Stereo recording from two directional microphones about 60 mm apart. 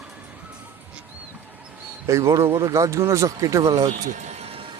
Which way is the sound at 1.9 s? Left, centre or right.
Right.